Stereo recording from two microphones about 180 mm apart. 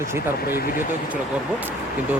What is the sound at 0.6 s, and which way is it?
Speech, 50° left (ahead or behind).